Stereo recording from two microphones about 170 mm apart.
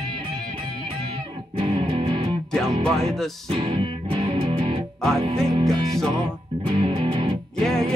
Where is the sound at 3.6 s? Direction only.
30° right (ahead or behind).